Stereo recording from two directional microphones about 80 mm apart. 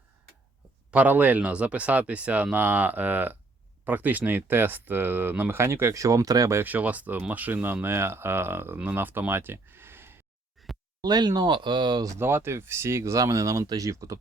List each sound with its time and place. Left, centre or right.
0.9 s speech: right
6.6 s speech: right
11.0 s speech: right
12.2 s speech: right